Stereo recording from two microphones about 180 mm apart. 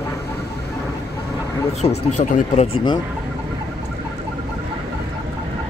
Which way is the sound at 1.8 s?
40° left (ahead or behind).